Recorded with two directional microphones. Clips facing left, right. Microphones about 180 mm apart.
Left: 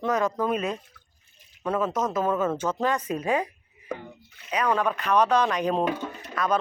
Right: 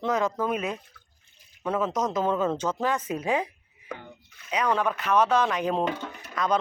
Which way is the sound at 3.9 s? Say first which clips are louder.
Left 4 dB; 30° left (ahead or behind).